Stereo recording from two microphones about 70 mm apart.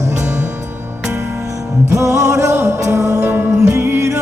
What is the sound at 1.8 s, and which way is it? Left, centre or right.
Music, right.